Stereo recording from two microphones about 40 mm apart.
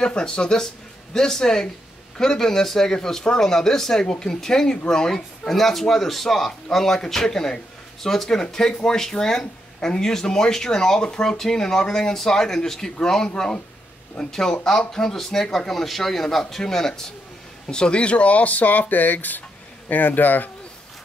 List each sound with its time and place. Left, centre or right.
0.0 s a man's voice: left